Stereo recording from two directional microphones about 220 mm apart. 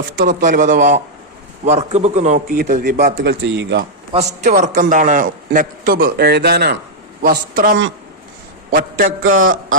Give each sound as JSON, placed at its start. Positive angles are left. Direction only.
{"t": 0.2, "sound": "a man's voice", "side_deg": -35}
{"t": 3.2, "sound": "a man's voice", "side_deg": -55}
{"t": 4.4, "sound": "a man's voice", "side_deg": -35}
{"t": 9.3, "sound": "a man's voice", "side_deg": -65}